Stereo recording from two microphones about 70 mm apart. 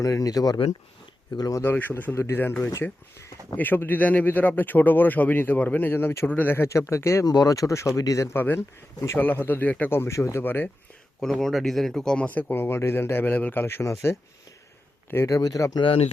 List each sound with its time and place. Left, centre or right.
0.0 s speech: left
1.6 s speech: left
2.1 s speech: left
7.3 s speech: left
8.3 s speech: left
9.9 s speech: left
10.4 s speech: left
11.2 s speech: centre
12.3 s speech: left
15.3 s speech: left